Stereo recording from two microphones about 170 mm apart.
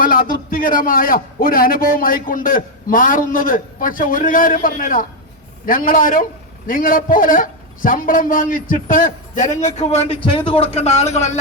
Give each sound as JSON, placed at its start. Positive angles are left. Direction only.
{"t": 0.0, "sound": "a man's voice", "side_deg": 55}